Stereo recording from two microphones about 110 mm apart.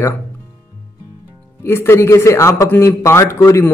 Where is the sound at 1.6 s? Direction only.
20° left (ahead or behind).